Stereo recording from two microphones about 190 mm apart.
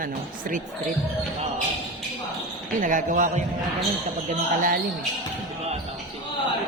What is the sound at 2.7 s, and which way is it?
Speech, 45° right (ahead or behind).